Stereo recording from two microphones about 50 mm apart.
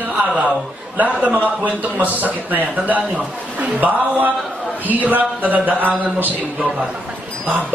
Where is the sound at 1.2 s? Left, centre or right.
Right.